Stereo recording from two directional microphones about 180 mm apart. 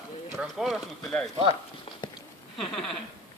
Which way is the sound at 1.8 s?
25° left (ahead or behind).